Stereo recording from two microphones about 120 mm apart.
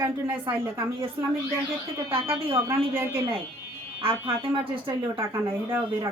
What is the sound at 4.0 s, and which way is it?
Speech, 50° right (ahead or behind).